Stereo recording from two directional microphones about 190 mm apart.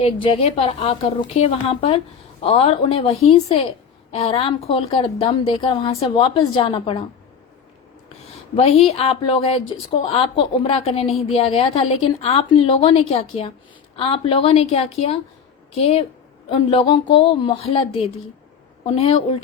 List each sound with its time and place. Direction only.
0.0 s a woman's voice: 30° left (ahead or behind)
8.5 s a woman's voice: 30° left (ahead or behind)